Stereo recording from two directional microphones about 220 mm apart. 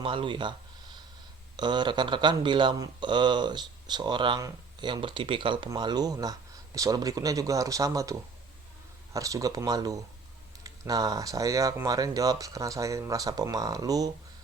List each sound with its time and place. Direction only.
0.0 s speech: 25° right (ahead or behind)
1.5 s speech: 20° right (ahead or behind)